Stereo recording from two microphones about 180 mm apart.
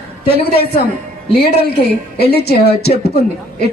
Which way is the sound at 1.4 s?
60° left (ahead or behind).